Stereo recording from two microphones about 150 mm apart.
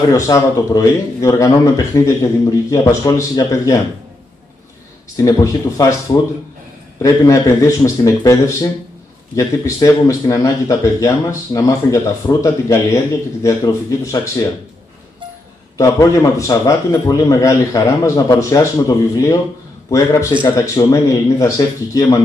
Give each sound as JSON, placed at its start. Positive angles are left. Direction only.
{"t": 0.1, "sound": "speech", "side_deg": 20}
{"t": 5.1, "sound": "speech", "side_deg": 20}
{"t": 7.0, "sound": "speech", "side_deg": 20}
{"t": 15.8, "sound": "speech", "side_deg": 20}